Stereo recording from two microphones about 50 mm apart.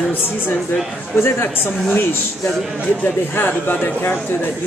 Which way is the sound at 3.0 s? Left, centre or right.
Left.